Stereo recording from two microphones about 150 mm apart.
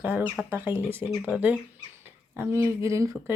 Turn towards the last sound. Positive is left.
turn(degrees=-20)  # may be behind; listen again after turning